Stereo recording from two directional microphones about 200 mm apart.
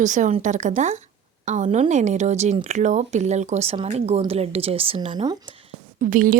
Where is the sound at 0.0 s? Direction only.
40° right (ahead or behind); by 5.4 s 20° right (ahead or behind).